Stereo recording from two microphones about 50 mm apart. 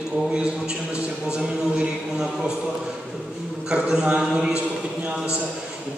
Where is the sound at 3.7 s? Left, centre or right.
Centre.